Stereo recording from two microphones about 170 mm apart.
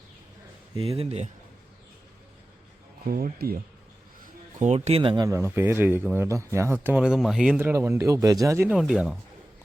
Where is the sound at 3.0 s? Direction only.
60° right (ahead or behind).